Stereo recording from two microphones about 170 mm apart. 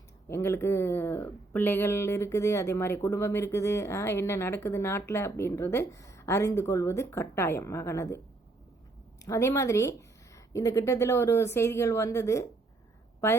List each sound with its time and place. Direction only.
0.3 s speech: 15° left (ahead or behind)
9.2 s speech: 15° left (ahead or behind)